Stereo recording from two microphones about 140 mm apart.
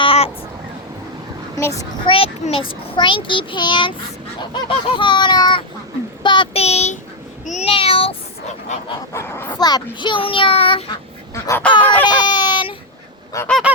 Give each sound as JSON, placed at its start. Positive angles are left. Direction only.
{"t": 0.0, "sound": "a sound", "side_deg": 40}
{"t": 1.5, "sound": "speech", "side_deg": 20}
{"t": 2.0, "sound": "a child's voice", "side_deg": 40}
{"t": 6.6, "sound": "child singing", "side_deg": 50}
{"t": 7.4, "sound": "meow", "side_deg": 60}
{"t": 7.7, "sound": "meow", "side_deg": 40}
{"t": 9.1, "sound": "speech", "side_deg": 15}
{"t": 9.6, "sound": "a child's voice", "side_deg": 30}
{"t": 11.4, "sound": "speech", "side_deg": 15}
{"t": 11.8, "sound": "baby cry", "side_deg": 10}
{"t": 12.0, "sound": "baby cry", "side_deg": 30}
{"t": 13.3, "sound": "goose", "side_deg": 20}